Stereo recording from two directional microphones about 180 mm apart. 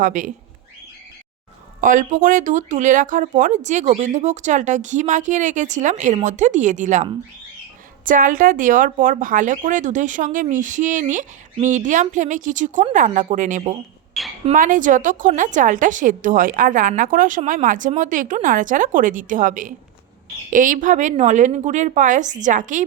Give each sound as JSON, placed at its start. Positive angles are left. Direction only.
{"t": 0.0, "sound": "speech", "side_deg": -45}
{"t": 1.8, "sound": "speech", "side_deg": -45}
{"t": 14.2, "sound": "squawk", "side_deg": 0}
{"t": 14.5, "sound": "speech", "side_deg": -50}